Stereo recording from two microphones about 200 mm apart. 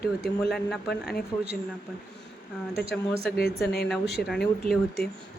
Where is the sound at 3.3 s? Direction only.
55° left (ahead or behind).